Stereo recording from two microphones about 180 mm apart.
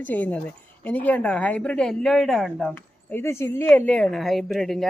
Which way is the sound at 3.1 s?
15° left (ahead or behind).